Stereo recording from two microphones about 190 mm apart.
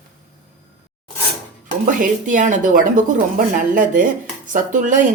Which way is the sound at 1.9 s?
45° right (ahead or behind).